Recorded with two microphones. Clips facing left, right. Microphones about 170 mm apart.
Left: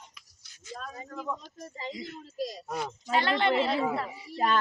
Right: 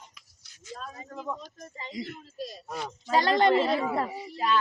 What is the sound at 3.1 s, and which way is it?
Speech, 40° right (ahead or behind).